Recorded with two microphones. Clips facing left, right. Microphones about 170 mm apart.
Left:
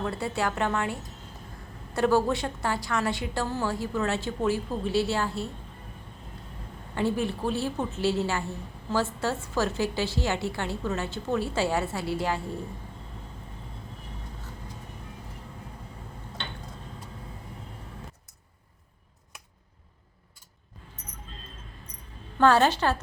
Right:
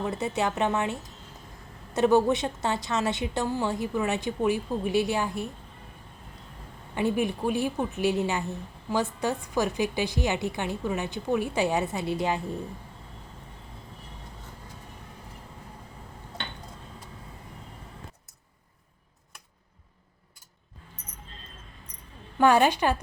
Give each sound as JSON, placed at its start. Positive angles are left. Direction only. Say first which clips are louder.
{"t": 0.0, "sound": "a woman's voice", "louder": "right 1 dB", "side_deg": -20}
{"t": 6.9, "sound": "a woman's voice", "louder": "right 1 dB", "side_deg": -15}
{"t": 22.4, "sound": "a woman's voice", "louder": "even", "side_deg": -15}